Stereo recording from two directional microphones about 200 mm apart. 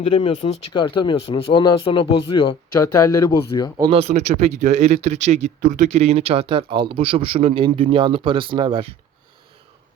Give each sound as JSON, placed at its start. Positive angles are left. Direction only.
{"t": 0.1, "sound": "speech", "side_deg": 25}
{"t": 2.8, "sound": "speech", "side_deg": 15}
{"t": 3.8, "sound": "speech", "side_deg": -25}